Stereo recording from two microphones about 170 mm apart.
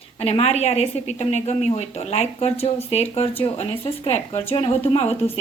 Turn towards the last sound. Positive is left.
turn(degrees=35)  # may be behind; listen again after turning